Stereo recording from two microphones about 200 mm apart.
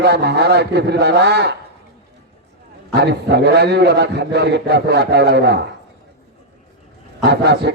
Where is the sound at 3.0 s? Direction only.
55° right (ahead or behind).